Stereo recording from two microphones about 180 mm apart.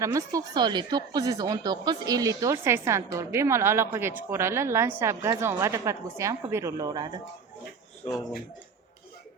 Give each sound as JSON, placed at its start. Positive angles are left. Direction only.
{"t": 0.0, "sound": "a woman's voice", "side_deg": -20}